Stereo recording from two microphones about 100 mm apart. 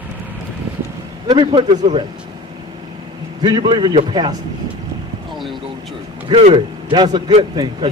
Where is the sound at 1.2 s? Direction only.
50° right (ahead or behind).